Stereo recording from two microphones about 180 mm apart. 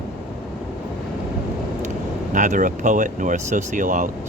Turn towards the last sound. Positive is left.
turn(degrees=-45)  # may be behind; listen again after turning